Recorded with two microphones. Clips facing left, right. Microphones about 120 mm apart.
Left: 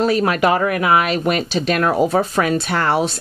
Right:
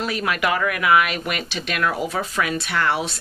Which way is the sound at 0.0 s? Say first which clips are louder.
Left 7 dB; 35° left (ahead or behind).